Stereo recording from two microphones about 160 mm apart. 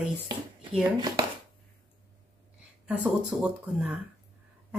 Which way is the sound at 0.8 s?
30° right (ahead or behind).